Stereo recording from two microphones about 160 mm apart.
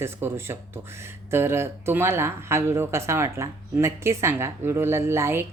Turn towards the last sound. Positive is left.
turn(degrees=-15)  # may be behind; listen again after turning